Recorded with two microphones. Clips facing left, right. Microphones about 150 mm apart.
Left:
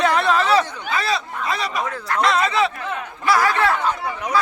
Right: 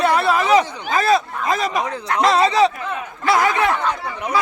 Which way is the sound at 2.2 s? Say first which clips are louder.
Right 5 dB; 35° right (ahead or behind).